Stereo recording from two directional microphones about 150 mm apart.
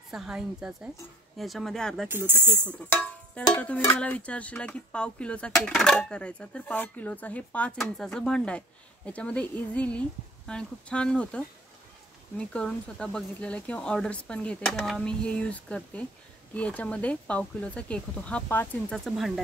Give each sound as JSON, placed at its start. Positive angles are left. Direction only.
{"t": 0.1, "sound": "a woman's voice", "side_deg": -5}
{"t": 2.0, "sound": "speech", "side_deg": -15}
{"t": 3.3, "sound": "speech", "side_deg": 10}
{"t": 19.0, "sound": "a woman's voice", "side_deg": 0}